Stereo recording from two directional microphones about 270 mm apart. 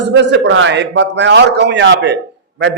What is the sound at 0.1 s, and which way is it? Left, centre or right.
A man's voice, right.